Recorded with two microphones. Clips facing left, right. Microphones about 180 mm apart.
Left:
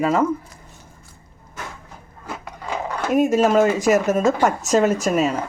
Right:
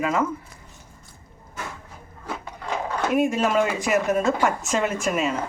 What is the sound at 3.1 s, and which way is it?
Speech, 40° left (ahead or behind).